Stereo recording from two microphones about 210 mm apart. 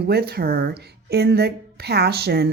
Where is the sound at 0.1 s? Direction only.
50° right (ahead or behind).